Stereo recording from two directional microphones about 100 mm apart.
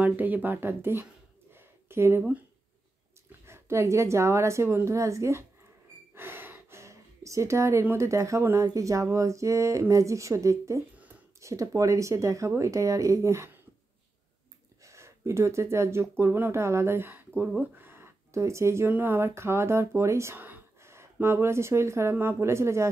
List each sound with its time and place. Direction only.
0.0 s speech: 15° right (ahead or behind)
1.5 s a sound: 25° right (ahead or behind)
3.3 s a woman's voice: 25° right (ahead or behind)
6.1 s a sound: 20° right (ahead or behind)
7.8 s speech: 25° right (ahead or behind)
14.9 s speech: 30° right (ahead or behind)